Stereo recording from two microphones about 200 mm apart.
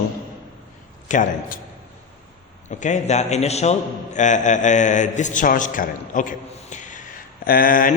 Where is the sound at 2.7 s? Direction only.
35° left (ahead or behind).